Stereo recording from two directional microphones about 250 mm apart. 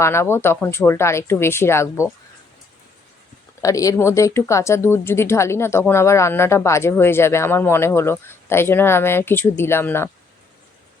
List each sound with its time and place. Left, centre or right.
0.0 s speech: centre
3.6 s speech: centre